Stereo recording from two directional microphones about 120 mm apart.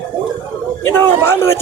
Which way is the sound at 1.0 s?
20° left (ahead or behind).